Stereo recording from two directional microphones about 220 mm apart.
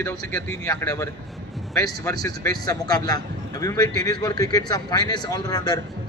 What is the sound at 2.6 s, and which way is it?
Speech, 15° left (ahead or behind).